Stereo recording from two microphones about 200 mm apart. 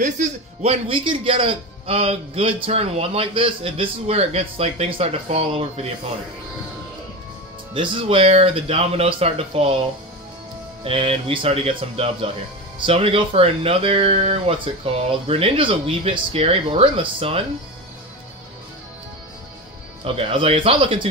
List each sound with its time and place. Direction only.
0.0 s a man's voice: 35° right (ahead or behind)
7.7 s a man's voice: 25° right (ahead or behind)
10.8 s a man's voice: 30° right (ahead or behind)
20.2 s a man's voice: 30° right (ahead or behind)